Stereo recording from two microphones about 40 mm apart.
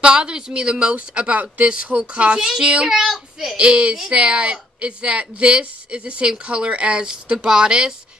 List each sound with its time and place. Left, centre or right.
0.0 s speech: right
2.3 s a child's voice: centre
3.5 s speech: right
7.4 s a child's voice: centre